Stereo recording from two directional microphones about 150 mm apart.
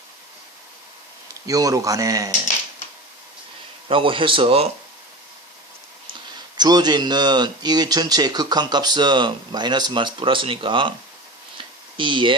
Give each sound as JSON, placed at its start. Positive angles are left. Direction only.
{"t": 1.5, "sound": "speech", "side_deg": -25}
{"t": 3.8, "sound": "speech", "side_deg": -35}
{"t": 6.6, "sound": "speech", "side_deg": -25}
{"t": 11.5, "sound": "a sound", "side_deg": -35}